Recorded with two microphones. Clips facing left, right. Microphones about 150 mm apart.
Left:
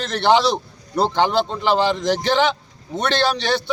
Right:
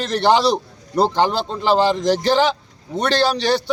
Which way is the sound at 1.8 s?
40° right (ahead or behind).